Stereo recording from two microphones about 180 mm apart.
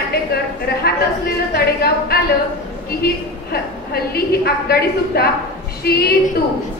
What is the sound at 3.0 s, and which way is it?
A woman's voice, 60° left (ahead or behind).